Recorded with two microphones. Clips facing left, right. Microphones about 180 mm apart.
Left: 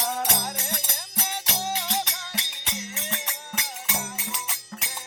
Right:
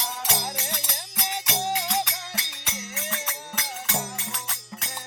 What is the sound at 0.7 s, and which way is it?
Music, 50° left (ahead or behind).